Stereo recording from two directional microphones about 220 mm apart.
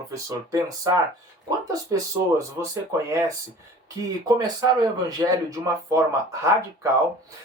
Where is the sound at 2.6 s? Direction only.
15° right (ahead or behind).